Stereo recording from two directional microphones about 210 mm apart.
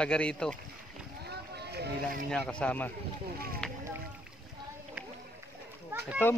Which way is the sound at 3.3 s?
45° right (ahead or behind).